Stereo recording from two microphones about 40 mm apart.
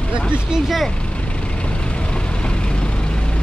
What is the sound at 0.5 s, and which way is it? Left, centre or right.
Speech, centre.